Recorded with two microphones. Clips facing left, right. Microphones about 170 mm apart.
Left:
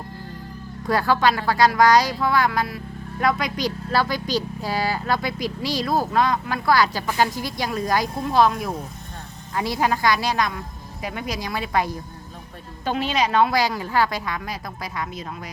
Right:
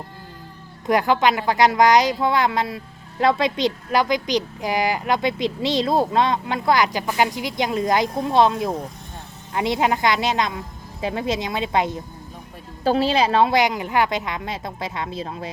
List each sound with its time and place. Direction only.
0.9 s a woman's voice: 20° right (ahead or behind)
12.8 s a woman's voice: 35° right (ahead or behind)